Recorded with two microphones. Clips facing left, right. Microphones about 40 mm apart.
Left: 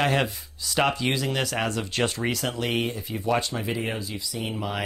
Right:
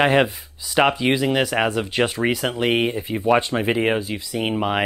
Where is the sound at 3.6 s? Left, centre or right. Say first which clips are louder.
Right 9 dB; right.